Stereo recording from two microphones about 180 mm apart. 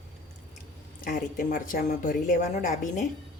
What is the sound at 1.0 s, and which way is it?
A woman's voice, 50° left (ahead or behind).